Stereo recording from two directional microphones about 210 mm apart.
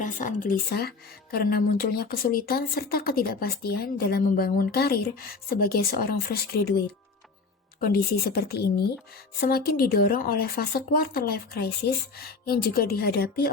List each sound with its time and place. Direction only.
0.0 s a woman's voice: 40° left (ahead or behind)
7.9 s a woman's voice: 45° left (ahead or behind)